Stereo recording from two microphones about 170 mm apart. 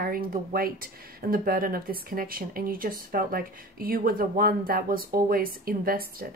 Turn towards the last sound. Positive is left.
turn(degrees=-60)  # may be behind; listen again after turning